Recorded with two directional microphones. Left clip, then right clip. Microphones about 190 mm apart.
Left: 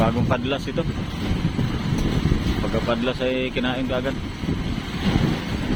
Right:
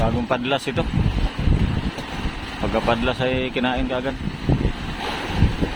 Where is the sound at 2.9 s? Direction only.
15° right (ahead or behind).